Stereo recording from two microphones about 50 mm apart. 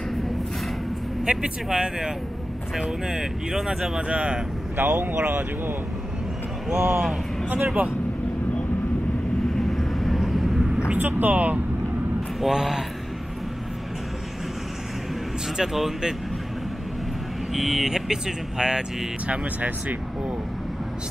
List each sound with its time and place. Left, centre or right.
1.2 s speech: centre
4.1 s speech: right
4.7 s speech: right
6.7 s speech: right
9.6 s vehicle: centre
11.0 s speech: right
12.4 s speech: centre
15.5 s speech: centre
17.5 s speech: centre
19.2 s speech: right